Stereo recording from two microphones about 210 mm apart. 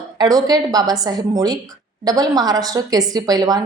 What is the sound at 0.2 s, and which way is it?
A woman's voice, 20° right (ahead or behind).